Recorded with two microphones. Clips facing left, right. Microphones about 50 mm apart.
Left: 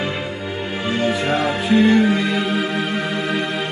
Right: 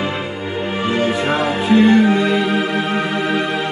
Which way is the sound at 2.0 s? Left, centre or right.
Right.